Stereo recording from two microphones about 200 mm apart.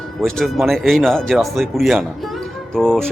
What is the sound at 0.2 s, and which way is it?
Speech, centre (ahead or behind).